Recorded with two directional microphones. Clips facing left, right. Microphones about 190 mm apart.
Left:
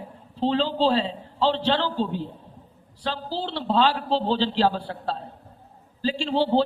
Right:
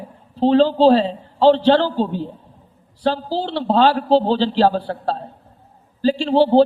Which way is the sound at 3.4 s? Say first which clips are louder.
Right 6 dB; 55° right (ahead or behind).